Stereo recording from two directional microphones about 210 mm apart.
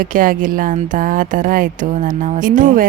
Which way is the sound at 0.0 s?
40° right (ahead or behind).